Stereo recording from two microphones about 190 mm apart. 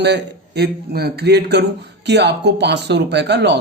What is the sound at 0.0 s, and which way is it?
Speech, 60° right (ahead or behind).